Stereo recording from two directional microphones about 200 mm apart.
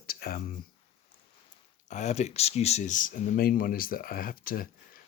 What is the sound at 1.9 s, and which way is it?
Speech, 35° left (ahead or behind).